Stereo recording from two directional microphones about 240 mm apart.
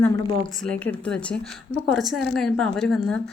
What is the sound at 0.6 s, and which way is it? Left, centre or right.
A woman's voice, centre.